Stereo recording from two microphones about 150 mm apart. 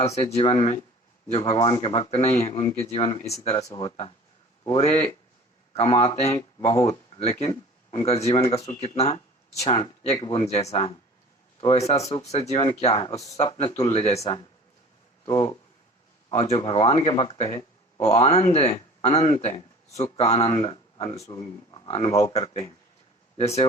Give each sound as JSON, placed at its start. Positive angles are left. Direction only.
{"t": 0.0, "sound": "speech", "side_deg": 45}
{"t": 10.2, "sound": "speech", "side_deg": 30}
{"t": 10.7, "sound": "speech", "side_deg": 45}
{"t": 15.2, "sound": "speech", "side_deg": 25}
{"t": 16.3, "sound": "speech", "side_deg": 45}
{"t": 19.9, "sound": "speech", "side_deg": 20}
{"t": 20.1, "sound": "speech", "side_deg": 45}
{"t": 21.2, "sound": "speech", "side_deg": 25}